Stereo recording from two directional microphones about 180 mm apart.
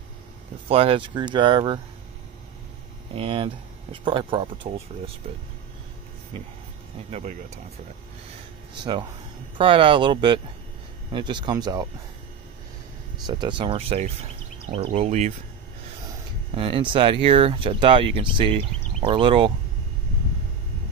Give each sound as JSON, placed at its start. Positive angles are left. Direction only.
{"t": 0.7, "sound": "speech", "side_deg": -30}
{"t": 3.2, "sound": "speech", "side_deg": -30}
{"t": 7.1, "sound": "speech", "side_deg": -40}
{"t": 9.6, "sound": "speech", "side_deg": -30}
{"t": 13.3, "sound": "speech", "side_deg": -25}
{"t": 16.5, "sound": "speech", "side_deg": -30}